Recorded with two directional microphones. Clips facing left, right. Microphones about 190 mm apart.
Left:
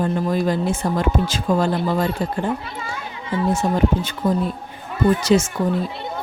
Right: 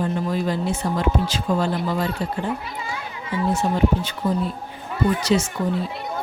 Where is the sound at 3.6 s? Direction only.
50° left (ahead or behind).